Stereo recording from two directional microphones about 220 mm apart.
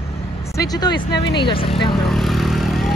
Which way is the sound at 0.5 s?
15° left (ahead or behind).